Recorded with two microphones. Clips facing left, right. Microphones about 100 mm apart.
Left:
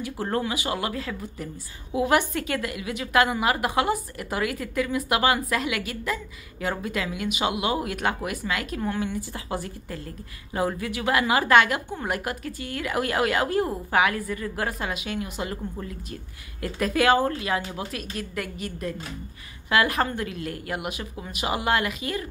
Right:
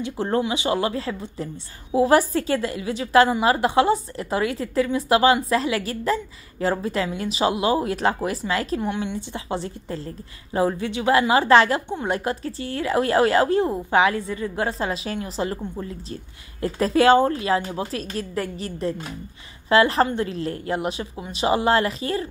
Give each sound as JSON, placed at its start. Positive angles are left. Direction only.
{"t": 0.0, "sound": "a woman's voice", "side_deg": -25}